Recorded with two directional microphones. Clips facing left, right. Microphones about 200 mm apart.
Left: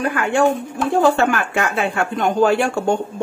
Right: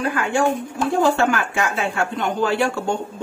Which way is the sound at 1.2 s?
60° left (ahead or behind).